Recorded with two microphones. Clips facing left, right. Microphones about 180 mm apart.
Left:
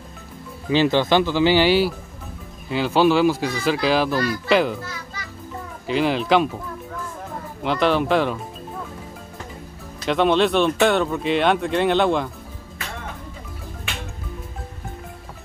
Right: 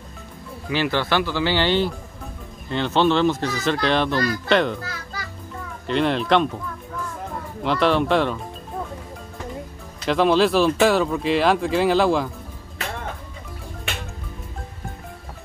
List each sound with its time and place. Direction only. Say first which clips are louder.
0.7 s speech: left 5 dB; 20° left (ahead or behind); by 4.7 s 5° left (ahead or behind)
5.9 s speech: even; 5° left (ahead or behind)
7.6 s speech: even; centre (ahead or behind)
10.0 s speech: even; centre (ahead or behind)